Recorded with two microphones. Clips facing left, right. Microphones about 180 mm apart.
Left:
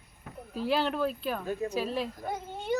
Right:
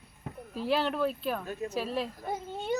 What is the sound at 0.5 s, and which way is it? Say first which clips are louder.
A woman's voice: even; centre (ahead or behind).